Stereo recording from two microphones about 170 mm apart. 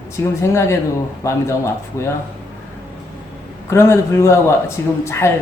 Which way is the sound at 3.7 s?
15° left (ahead or behind).